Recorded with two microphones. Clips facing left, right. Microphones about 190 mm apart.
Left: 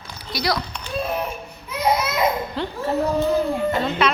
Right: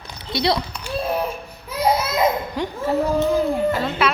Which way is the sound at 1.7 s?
35° right (ahead or behind).